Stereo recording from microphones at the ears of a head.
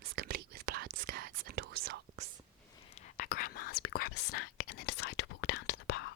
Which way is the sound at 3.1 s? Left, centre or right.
Left.